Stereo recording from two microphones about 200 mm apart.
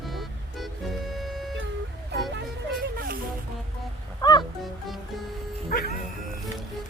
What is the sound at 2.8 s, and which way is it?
Music, 50° right (ahead or behind).